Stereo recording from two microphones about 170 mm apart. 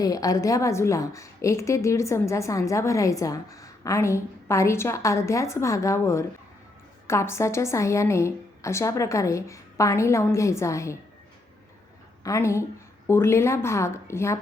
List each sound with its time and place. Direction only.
0.0 s a woman's voice: 20° left (ahead or behind)
12.2 s a woman's voice: 20° left (ahead or behind)